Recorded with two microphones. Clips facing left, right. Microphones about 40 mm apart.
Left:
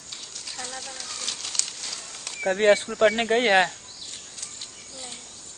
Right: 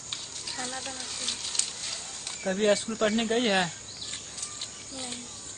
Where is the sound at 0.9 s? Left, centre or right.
Left.